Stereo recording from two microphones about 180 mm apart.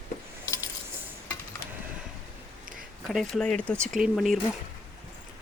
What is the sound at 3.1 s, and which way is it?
Speech, centre (ahead or behind).